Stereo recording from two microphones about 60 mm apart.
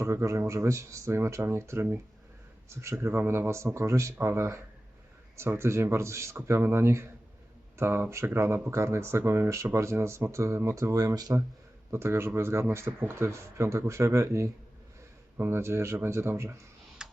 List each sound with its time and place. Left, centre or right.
0.0 s speech: right
10.9 s speech: right
11.9 s speech: right
15.4 s speech: right
17.0 s tick-tock: centre